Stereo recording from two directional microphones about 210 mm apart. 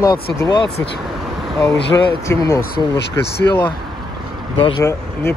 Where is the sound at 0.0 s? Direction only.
15° left (ahead or behind).